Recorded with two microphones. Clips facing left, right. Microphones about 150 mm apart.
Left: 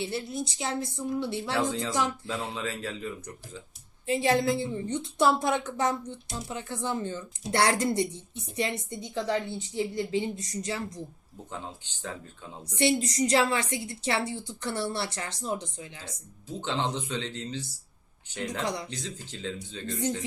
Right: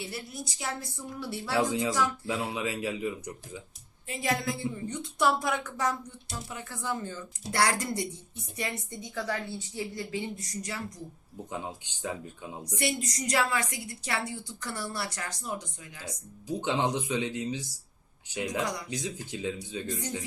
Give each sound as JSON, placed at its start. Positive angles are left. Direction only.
{"t": 0.0, "sound": "a woman's voice", "side_deg": 25}
{"t": 1.5, "sound": "speech", "side_deg": -15}
{"t": 4.0, "sound": "a woman's voice", "side_deg": 30}
{"t": 11.5, "sound": "speech", "side_deg": -15}
{"t": 12.7, "sound": "a woman's voice", "side_deg": 25}
{"t": 16.5, "sound": "speech", "side_deg": -10}
{"t": 18.6, "sound": "a woman's voice", "side_deg": 25}
{"t": 18.9, "sound": "speech", "side_deg": -10}